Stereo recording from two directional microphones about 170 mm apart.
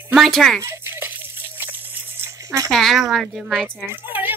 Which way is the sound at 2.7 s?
Centre (ahead or behind).